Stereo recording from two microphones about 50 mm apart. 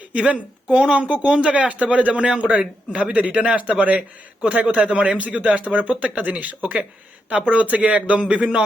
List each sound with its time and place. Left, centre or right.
0.1 s speech: right